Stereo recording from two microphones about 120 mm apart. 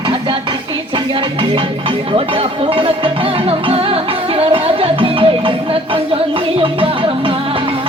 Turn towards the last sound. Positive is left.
turn(degrees=-50)  # may be behind; listen again after turning